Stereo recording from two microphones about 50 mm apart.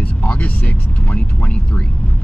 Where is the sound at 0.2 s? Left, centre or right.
Left.